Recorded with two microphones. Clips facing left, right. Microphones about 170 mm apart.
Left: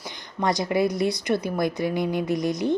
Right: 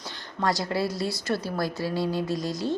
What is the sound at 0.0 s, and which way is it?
A woman's voice, 15° left (ahead or behind).